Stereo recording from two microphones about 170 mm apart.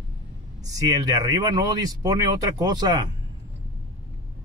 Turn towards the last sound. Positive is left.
turn(degrees=-25)  # may be behind; listen again after turning